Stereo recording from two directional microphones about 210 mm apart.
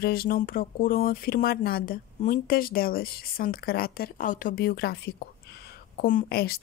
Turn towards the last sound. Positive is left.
turn(degrees=50)  # may be behind; listen again after turning